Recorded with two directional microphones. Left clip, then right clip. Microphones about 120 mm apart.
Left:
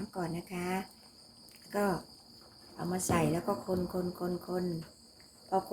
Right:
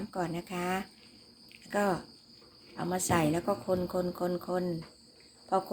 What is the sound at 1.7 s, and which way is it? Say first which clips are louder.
Speech: right 3 dB; 25° right (ahead or behind).